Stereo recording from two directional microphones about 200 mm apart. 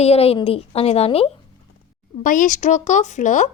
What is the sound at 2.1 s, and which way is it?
A woman's voice, 40° left (ahead or behind).